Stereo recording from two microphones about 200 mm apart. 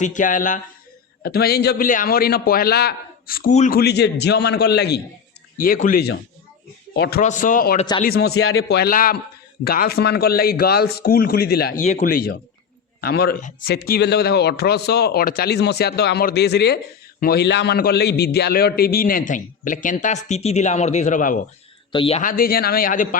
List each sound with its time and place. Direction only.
0.0 s a man's voice: 40° left (ahead or behind)
3.5 s a man's voice: 35° left (ahead or behind)
3.8 s a man's voice: 55° left (ahead or behind)
5.5 s a man's voice: 45° left (ahead or behind)
6.9 s a man's voice: 60° left (ahead or behind)
7.2 s a man's voice: 40° left (ahead or behind)
8.3 s a man's voice: 90° left
8.7 s a man's voice: 50° left (ahead or behind)
11.8 s a man's voice: 40° left (ahead or behind)
21.9 s speech: 30° left (ahead or behind)
22.2 s a man's voice: 45° left (ahead or behind)